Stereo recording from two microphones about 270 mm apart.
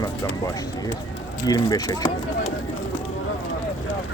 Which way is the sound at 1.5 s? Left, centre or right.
Centre.